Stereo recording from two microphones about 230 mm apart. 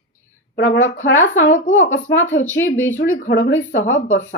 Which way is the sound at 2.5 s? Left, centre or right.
Left.